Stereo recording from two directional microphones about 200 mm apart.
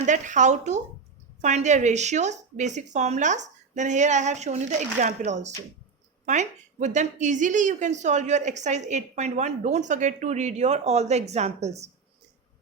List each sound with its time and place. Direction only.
0.0 s a woman's voice: 40° right (ahead or behind)